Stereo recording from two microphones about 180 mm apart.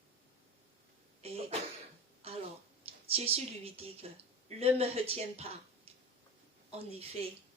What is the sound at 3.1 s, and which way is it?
Speech, 35° right (ahead or behind).